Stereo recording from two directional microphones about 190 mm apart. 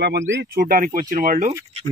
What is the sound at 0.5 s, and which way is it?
Speech, 50° right (ahead or behind).